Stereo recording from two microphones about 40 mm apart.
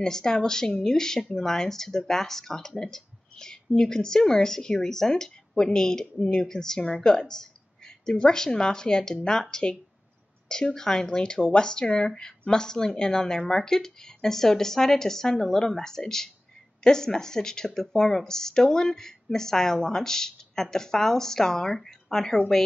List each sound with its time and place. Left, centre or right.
0.0 s a woman's voice: centre